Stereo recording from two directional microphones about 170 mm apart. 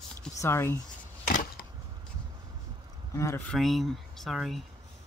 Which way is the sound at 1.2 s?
55° left (ahead or behind).